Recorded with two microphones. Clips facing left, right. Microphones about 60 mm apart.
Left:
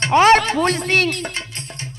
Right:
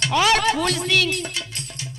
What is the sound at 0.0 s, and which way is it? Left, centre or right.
Speech, left.